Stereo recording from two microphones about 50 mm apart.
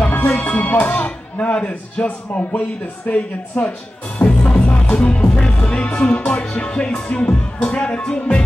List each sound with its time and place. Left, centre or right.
0.0 s music: left
0.5 s speech: left
3.1 s speech: left
4.2 s music: left
6.6 s speech: left